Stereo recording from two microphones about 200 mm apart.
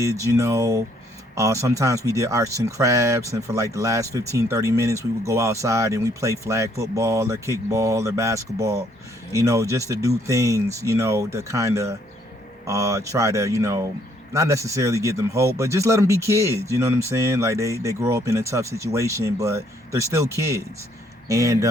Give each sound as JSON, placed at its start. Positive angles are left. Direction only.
{"t": 0.0, "sound": "speech", "side_deg": -15}